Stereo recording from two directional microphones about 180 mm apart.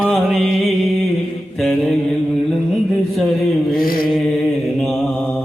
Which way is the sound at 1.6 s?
5° left (ahead or behind).